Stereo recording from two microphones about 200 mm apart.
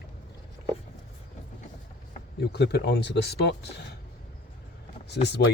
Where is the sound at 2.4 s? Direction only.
55° left (ahead or behind).